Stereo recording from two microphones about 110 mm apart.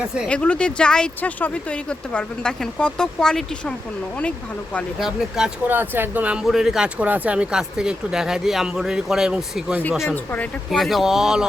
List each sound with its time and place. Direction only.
0.3 s speech: 10° left (ahead or behind)
4.9 s speech: 5° right (ahead or behind)
5.6 s speech: 15° right (ahead or behind)
6.4 s speech: 5° right (ahead or behind)
10.1 s speech: 15° left (ahead or behind)
10.7 s speech: centre (ahead or behind)